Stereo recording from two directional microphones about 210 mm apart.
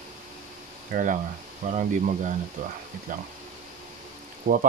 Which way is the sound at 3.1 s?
40° right (ahead or behind).